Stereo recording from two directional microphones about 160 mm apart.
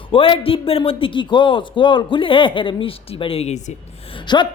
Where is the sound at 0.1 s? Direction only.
35° left (ahead or behind).